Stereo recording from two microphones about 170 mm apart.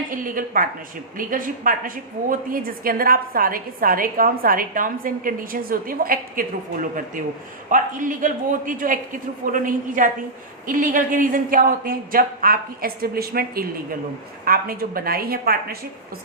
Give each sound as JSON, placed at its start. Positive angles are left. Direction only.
{"t": 0.1, "sound": "a woman's voice", "side_deg": -55}